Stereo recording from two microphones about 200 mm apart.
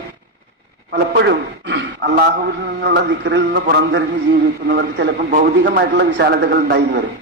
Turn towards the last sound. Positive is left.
turn(degrees=-55)  # may be behind; listen again after turning